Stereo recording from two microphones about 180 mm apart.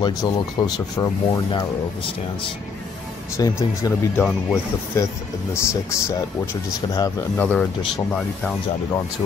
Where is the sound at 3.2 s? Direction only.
15° left (ahead or behind).